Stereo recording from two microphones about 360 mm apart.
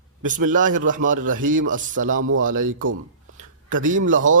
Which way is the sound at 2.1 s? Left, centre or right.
Right.